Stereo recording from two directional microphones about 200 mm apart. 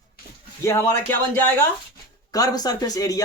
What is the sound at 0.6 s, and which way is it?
Speech, 15° left (ahead or behind).